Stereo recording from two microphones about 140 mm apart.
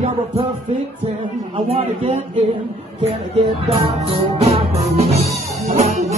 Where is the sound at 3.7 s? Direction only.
45° right (ahead or behind).